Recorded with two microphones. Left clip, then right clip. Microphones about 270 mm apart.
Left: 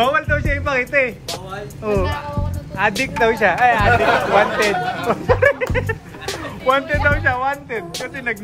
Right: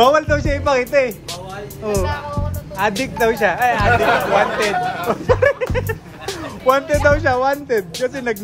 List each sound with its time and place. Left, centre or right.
0.0 s speech: centre
6.7 s speech: centre